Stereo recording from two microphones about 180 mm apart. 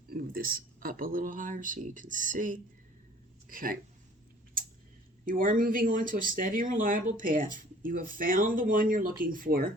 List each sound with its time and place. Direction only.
0.1 s speech: 55° right (ahead or behind)
5.2 s speech: 50° right (ahead or behind)